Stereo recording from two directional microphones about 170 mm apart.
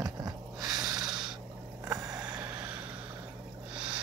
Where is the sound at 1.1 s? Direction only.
5° right (ahead or behind).